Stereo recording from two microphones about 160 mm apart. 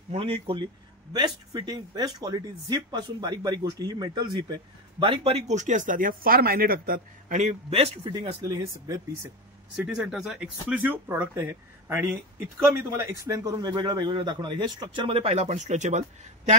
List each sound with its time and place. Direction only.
0.1 s speech: 35° right (ahead or behind)
5.0 s speech: 35° right (ahead or behind); by 9.0 s 20° right (ahead or behind)
9.8 s speech: 5° right (ahead or behind); by 16.5 s 50° right (ahead or behind)